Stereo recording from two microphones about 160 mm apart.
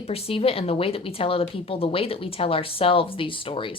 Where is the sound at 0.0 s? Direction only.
35° left (ahead or behind).